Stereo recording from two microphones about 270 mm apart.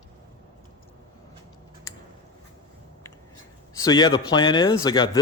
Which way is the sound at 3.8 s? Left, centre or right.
Centre.